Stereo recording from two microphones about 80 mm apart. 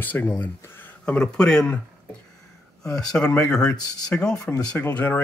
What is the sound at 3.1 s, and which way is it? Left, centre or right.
Speech, centre.